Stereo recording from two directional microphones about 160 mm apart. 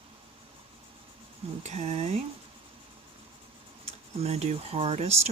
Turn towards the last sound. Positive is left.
turn(degrees=-40)  # may be behind; listen again after turning